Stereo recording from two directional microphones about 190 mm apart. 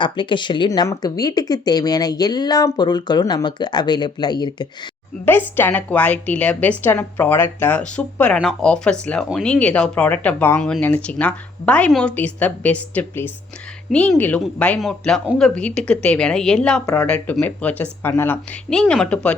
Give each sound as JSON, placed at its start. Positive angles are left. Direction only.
{"t": 0.0, "sound": "speech", "side_deg": 25}
{"t": 5.5, "sound": "a woman's voice", "side_deg": 10}